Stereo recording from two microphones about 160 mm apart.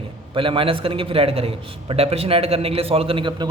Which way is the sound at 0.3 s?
35° right (ahead or behind).